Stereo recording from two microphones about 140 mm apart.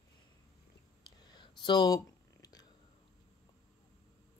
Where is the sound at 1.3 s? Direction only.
35° left (ahead or behind).